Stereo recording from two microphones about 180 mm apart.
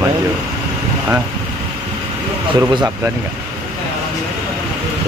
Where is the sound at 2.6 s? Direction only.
20° right (ahead or behind).